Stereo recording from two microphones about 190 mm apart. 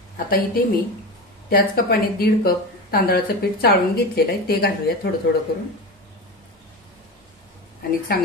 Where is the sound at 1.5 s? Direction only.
55° left (ahead or behind).